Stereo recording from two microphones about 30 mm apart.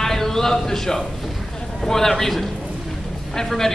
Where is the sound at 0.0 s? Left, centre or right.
Centre.